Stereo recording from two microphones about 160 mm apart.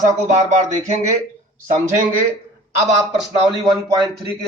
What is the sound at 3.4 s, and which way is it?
Speech, 30° right (ahead or behind).